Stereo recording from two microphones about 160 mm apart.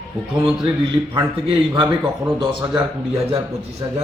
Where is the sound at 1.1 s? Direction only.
30° right (ahead or behind).